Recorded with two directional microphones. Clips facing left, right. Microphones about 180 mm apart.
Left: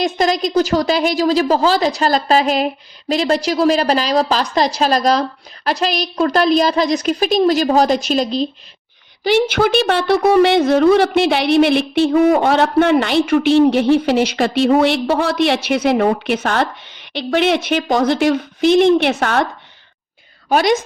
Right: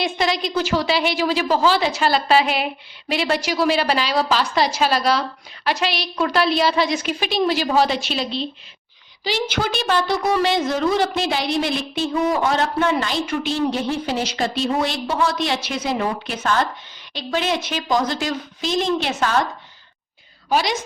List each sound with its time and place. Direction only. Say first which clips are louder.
0.0 s a woman's voice: left 5 dB; 45° left (ahead or behind)
9.2 s a woman's voice: left 9 dB; 60° left (ahead or behind)
20.5 s a woman's voice: left 6 dB; 55° left (ahead or behind)